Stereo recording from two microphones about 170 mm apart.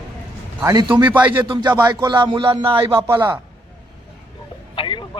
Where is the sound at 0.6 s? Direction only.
20° right (ahead or behind).